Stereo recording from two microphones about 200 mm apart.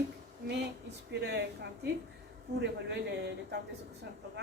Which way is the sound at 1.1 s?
60° right (ahead or behind).